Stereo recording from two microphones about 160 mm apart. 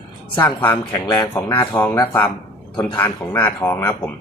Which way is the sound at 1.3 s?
10° left (ahead or behind).